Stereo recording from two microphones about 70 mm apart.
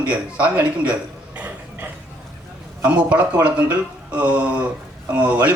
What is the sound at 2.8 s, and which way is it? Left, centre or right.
A man's voice, centre.